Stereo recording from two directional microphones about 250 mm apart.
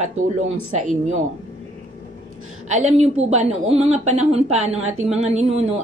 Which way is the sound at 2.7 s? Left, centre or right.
Right.